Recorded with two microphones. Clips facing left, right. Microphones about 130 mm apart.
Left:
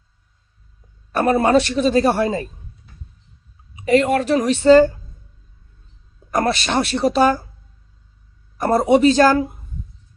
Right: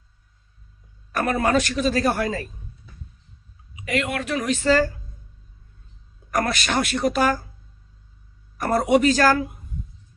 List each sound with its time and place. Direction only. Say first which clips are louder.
1.1 s a man's voice: left 6 dB; 30° left (ahead or behind)
3.8 s a woman's voice: left 10 dB; 35° left (ahead or behind)
6.3 s a man's voice: left 4 dB; 25° left (ahead or behind)
8.5 s a man's voice: left 4 dB; 25° left (ahead or behind)